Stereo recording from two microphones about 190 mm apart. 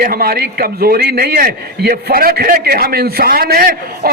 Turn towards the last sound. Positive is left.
turn(degrees=-50)  # may be behind; listen again after turning